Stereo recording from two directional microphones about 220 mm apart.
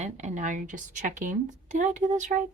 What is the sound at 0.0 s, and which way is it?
Speech, 35° right (ahead or behind).